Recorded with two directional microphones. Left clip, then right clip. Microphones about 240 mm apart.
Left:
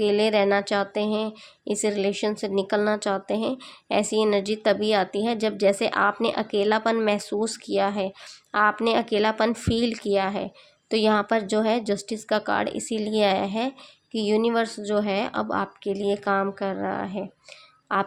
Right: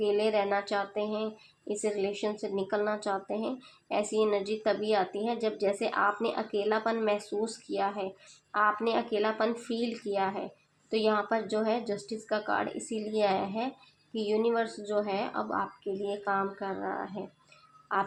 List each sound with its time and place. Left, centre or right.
0.0 s speech: left